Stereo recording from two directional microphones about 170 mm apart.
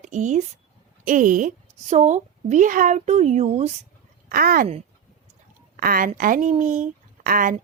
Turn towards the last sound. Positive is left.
turn(degrees=-55)  # may be behind; listen again after turning